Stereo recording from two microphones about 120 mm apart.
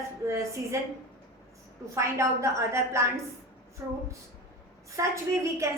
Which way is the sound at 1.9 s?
25° right (ahead or behind).